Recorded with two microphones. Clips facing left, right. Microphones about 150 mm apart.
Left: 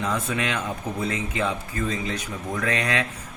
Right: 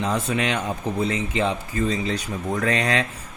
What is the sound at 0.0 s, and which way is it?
Speech, 30° right (ahead or behind).